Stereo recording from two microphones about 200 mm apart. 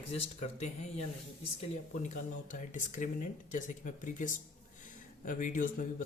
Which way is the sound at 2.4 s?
40° left (ahead or behind).